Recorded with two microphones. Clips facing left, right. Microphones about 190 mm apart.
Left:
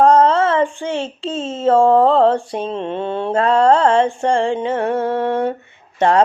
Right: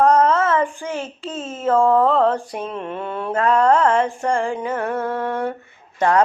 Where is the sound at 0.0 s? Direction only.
30° left (ahead or behind).